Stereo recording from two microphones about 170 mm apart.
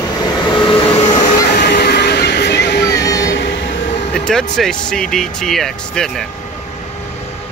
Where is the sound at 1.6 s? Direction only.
70° left (ahead or behind); by 3.6 s 90° left.